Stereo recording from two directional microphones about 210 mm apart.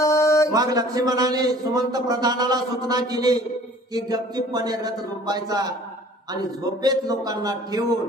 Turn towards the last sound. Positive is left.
turn(degrees=-20)  # may be behind; listen again after turning